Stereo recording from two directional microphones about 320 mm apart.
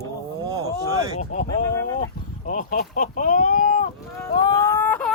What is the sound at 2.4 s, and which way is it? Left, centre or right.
Speech, left.